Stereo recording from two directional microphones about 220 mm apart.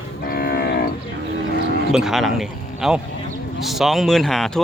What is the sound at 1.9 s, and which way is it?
Speech, centre (ahead or behind).